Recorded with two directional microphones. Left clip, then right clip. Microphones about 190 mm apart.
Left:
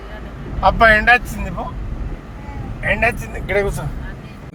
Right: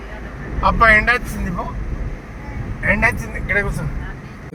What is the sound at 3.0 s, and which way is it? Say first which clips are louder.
Speech: even; 60° left (ahead or behind).